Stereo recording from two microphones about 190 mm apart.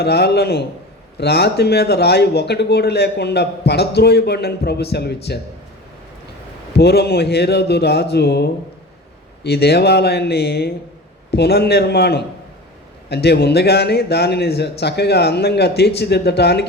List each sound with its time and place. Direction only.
0.0 s a man's voice: 60° left (ahead or behind)
6.7 s a man's voice: 60° left (ahead or behind)